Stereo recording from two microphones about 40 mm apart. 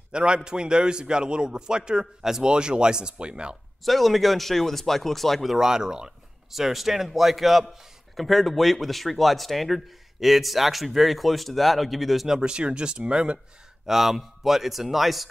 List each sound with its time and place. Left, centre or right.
0.1 s a man's voice: right
3.8 s speech: centre
5.6 s speech: centre
6.5 s speech: centre
12.4 s a man's voice: right
13.8 s speech: centre